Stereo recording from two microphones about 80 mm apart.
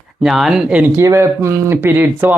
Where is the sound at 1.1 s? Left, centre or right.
Right.